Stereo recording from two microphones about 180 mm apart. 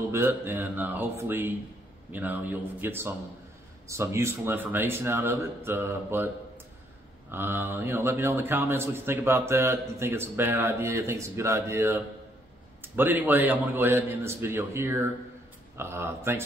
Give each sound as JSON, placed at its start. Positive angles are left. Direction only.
{"t": 0.1, "sound": "a man's voice", "side_deg": -10}